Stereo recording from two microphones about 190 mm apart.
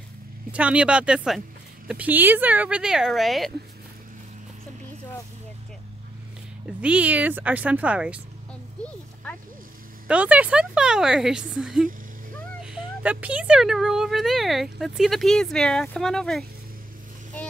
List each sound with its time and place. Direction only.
0.5 s speech: 5° right (ahead or behind)
6.8 s speech: 5° right (ahead or behind)
10.0 s speech: 5° right (ahead or behind)